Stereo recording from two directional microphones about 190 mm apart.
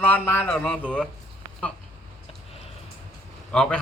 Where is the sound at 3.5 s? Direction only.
5° left (ahead or behind).